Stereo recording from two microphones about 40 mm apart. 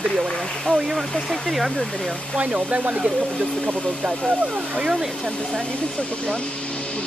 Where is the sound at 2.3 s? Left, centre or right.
Right.